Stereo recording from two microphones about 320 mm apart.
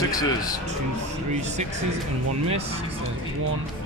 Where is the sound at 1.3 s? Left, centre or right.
Right.